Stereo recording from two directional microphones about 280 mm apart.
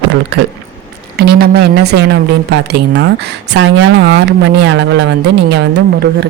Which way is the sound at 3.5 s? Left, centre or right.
Right.